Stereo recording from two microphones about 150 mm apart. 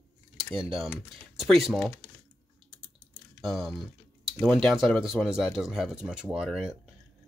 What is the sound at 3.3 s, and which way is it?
Speech, centre (ahead or behind).